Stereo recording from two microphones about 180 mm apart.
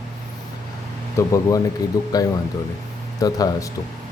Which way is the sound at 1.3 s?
20° left (ahead or behind).